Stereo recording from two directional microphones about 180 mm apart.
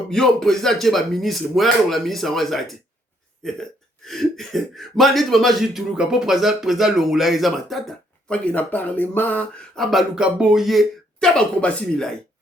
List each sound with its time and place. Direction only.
0.1 s speech: 5° left (ahead or behind)